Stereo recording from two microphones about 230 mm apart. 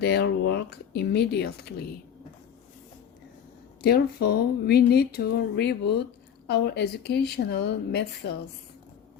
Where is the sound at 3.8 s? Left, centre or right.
Left.